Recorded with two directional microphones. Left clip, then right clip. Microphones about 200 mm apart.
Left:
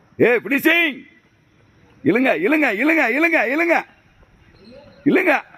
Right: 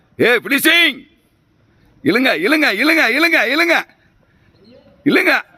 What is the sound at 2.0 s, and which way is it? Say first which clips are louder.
Speech: right 2 dB; 60° right (ahead or behind).